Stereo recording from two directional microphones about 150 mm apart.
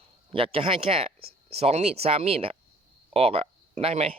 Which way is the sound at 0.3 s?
40° right (ahead or behind).